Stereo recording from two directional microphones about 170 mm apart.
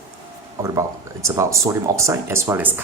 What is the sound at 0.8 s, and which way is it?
Speech, 15° right (ahead or behind).